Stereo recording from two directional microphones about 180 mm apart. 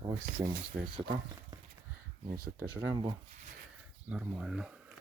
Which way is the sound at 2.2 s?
55° right (ahead or behind).